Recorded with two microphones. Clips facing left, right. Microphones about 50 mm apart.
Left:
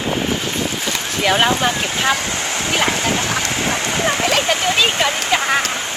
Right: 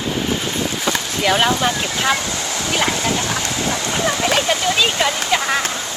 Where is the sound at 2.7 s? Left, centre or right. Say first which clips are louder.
Left 1 dB; left.